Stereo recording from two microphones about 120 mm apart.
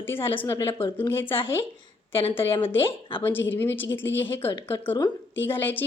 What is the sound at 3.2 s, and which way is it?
Speech, 15° left (ahead or behind).